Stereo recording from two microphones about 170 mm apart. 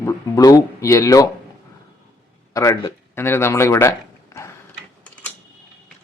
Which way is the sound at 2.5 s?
20° left (ahead or behind).